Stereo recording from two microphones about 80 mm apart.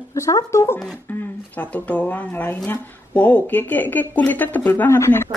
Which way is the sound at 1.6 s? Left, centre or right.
Centre.